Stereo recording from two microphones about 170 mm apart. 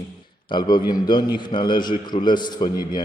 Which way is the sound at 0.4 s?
25° left (ahead or behind).